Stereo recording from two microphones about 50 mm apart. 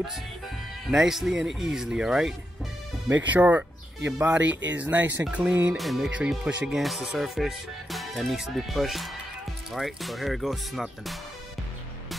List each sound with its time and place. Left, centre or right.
0.8 s speech: centre
3.1 s speech: right
5.8 s speech: centre
6.0 s speech: right
6.7 s speech: centre